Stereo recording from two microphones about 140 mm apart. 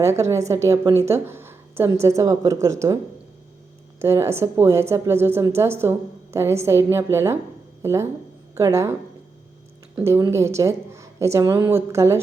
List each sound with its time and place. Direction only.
0.0 s a woman's voice: 20° right (ahead or behind)
4.0 s a woman's voice: 20° right (ahead or behind)